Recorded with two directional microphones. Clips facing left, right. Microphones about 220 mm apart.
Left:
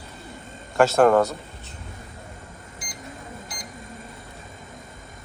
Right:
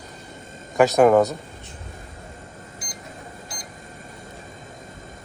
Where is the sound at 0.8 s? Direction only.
15° right (ahead or behind).